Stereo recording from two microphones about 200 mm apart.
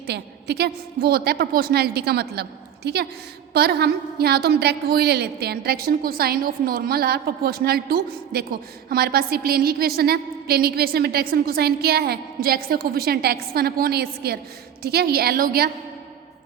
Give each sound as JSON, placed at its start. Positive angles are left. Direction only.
{"t": 0.1, "sound": "a woman's voice", "side_deg": -55}